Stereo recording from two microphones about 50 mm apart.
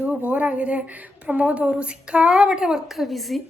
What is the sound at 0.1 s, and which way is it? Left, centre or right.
A woman's voice, right.